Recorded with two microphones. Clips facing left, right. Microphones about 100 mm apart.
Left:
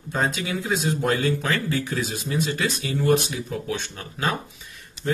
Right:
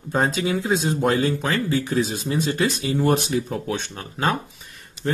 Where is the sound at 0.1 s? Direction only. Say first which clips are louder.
Right 4 dB; 30° right (ahead or behind).